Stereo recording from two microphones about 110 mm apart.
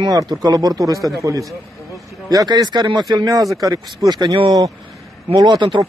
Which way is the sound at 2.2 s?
40° right (ahead or behind).